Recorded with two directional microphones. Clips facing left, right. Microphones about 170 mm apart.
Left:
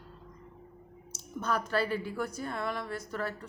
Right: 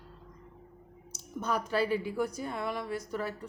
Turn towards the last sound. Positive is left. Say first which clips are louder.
# right 1 dB
turn(degrees=-15)  # may be behind; listen again after turning